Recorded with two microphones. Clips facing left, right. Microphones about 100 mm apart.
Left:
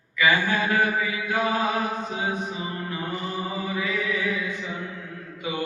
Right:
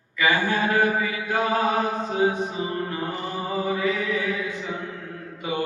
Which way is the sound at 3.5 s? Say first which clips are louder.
Right 7 dB; 35° right (ahead or behind).